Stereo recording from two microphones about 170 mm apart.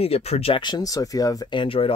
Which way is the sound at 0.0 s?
35° left (ahead or behind).